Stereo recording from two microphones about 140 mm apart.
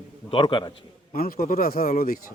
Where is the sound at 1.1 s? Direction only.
90° left.